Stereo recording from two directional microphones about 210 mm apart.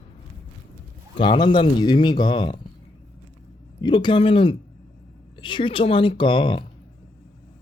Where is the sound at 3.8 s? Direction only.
20° left (ahead or behind).